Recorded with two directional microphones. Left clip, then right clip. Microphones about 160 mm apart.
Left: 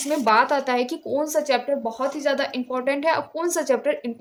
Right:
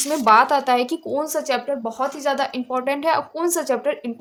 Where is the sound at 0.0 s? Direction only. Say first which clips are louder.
Right 4 dB; 35° right (ahead or behind).